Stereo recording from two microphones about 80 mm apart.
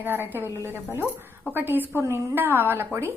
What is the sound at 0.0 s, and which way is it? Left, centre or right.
A woman's voice, right.